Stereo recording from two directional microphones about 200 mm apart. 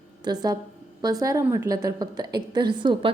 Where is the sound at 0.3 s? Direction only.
20° right (ahead or behind).